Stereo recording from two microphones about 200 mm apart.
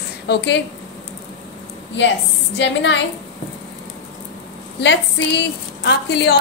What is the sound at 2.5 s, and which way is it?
Speech, 65° left (ahead or behind).